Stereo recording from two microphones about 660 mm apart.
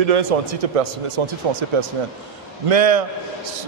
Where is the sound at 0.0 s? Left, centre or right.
Right.